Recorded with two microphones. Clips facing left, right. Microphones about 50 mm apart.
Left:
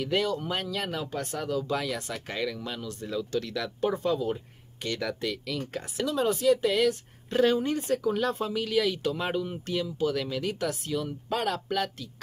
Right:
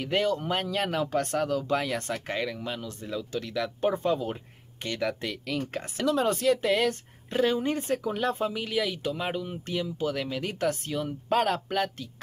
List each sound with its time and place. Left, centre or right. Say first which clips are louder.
0.0 s speech: right 1 dB; right
1.1 s speech: right 2 dB; right
2.2 s speech: right 1 dB; right
2.6 s speech: right 1 dB; centre; by 6.2 s right
6.2 s speech: left 5 dB; right
6.6 s speech: left 1 dB; right
7.3 s speech: left 2 dB; centre
7.6 s speech: left 1 dB; right